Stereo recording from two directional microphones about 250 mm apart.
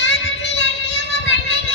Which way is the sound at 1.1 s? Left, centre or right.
Left.